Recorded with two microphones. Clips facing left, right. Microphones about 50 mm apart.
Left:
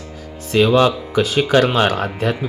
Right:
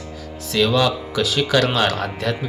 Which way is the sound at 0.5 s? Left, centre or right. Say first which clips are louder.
Left 4 dB; left.